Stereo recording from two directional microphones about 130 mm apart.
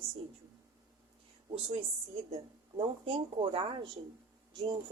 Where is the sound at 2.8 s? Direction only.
40° right (ahead or behind).